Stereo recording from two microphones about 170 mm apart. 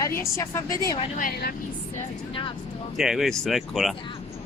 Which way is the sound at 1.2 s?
55° left (ahead or behind).